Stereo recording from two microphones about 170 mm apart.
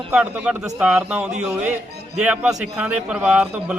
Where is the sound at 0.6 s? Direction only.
20° right (ahead or behind).